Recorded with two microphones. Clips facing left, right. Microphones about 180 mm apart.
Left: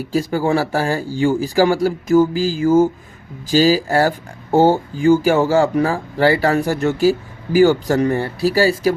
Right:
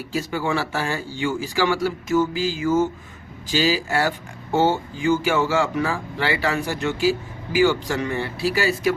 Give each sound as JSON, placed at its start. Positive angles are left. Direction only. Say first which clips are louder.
{"t": 0.0, "sound": "speech", "louder": "left 7 dB", "side_deg": 40}